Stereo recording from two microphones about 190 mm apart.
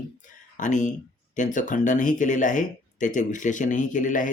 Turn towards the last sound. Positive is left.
turn(degrees=45)  # may be behind; listen again after turning